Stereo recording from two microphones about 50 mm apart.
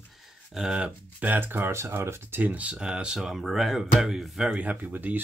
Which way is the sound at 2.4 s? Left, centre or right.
Right.